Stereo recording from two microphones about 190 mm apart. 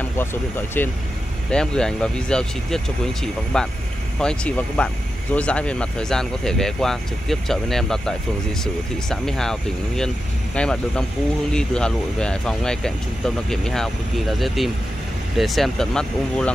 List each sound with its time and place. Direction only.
0.2 s speech: 10° left (ahead or behind)